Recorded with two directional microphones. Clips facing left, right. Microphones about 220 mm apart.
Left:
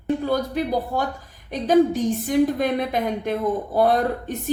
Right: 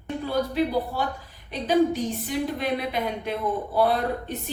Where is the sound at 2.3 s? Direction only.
45° left (ahead or behind).